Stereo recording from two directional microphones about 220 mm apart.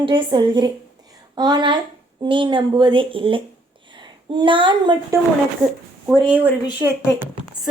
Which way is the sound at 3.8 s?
20° right (ahead or behind).